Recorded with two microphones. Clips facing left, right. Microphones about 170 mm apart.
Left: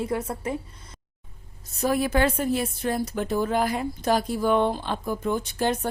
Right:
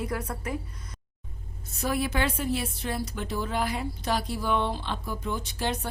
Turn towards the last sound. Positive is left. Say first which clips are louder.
# left 6 dB
turn(degrees=45)  # may be behind; listen again after turning